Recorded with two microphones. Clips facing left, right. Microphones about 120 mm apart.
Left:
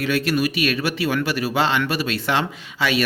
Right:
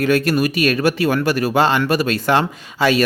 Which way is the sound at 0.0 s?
45° right (ahead or behind).